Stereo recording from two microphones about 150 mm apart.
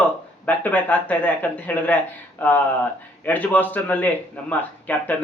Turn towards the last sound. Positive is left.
turn(degrees=10)  # may be behind; listen again after turning